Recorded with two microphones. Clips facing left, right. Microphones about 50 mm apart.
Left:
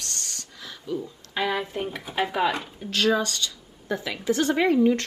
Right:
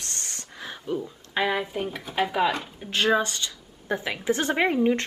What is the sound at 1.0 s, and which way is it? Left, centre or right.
Speech, centre.